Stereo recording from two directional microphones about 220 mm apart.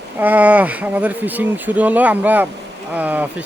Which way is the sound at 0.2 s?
5° right (ahead or behind).